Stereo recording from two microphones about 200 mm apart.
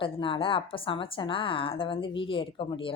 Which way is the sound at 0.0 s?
25° left (ahead or behind).